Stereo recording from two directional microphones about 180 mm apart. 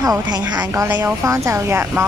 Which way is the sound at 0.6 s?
10° right (ahead or behind).